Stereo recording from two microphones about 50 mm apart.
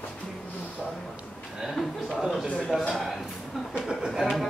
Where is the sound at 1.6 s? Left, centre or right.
Centre.